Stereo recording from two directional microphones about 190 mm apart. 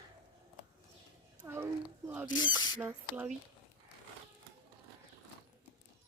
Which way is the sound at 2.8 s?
10° right (ahead or behind).